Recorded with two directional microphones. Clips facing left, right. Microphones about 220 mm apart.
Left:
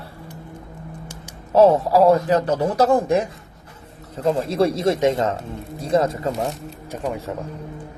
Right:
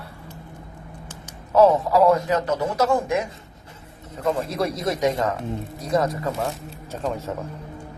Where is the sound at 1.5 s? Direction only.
30° left (ahead or behind).